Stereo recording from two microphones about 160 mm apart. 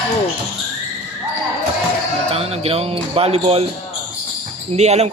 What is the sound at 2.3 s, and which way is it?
A man's voice, 40° right (ahead or behind).